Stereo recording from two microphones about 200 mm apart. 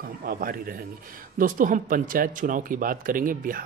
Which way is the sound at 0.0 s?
50° right (ahead or behind).